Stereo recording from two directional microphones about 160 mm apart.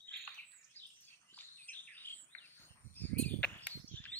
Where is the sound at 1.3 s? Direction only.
10° left (ahead or behind).